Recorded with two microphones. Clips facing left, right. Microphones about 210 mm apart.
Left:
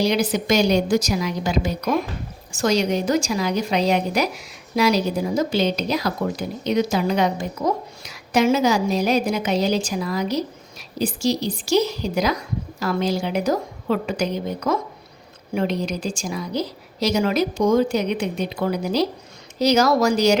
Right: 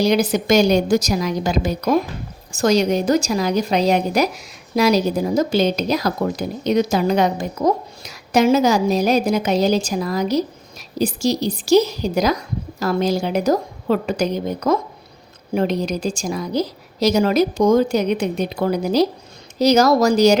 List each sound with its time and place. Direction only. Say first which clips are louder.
0.0 s a woman's voice: right 3 dB; 45° right (ahead or behind)